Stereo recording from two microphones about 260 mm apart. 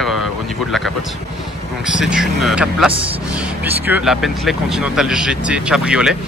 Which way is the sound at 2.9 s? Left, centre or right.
Right.